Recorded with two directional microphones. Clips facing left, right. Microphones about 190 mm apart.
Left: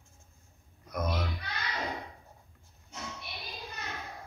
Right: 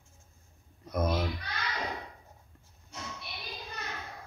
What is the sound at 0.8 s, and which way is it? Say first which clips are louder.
Speech: right 4 dB; 30° right (ahead or behind).